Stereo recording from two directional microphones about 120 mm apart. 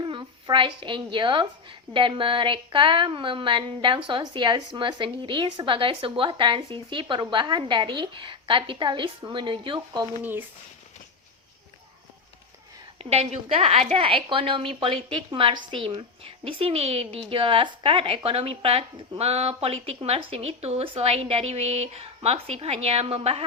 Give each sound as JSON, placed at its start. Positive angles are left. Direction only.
{"t": 0.0, "sound": "a woman's voice", "side_deg": -40}
{"t": 13.0, "sound": "a woman's voice", "side_deg": -60}